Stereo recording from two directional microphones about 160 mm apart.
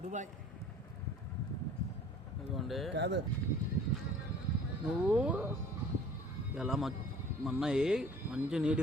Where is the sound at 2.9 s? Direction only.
90° right.